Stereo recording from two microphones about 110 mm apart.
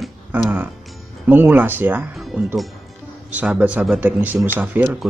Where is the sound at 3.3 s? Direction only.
10° right (ahead or behind).